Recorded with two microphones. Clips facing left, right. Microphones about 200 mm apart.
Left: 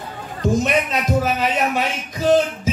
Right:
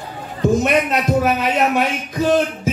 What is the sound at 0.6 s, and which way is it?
A man's voice, 60° right (ahead or behind).